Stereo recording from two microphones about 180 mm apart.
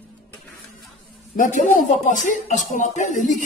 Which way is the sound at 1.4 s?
45° left (ahead or behind).